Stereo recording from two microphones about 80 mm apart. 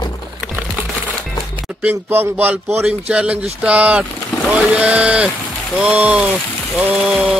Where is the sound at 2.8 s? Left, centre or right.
Centre.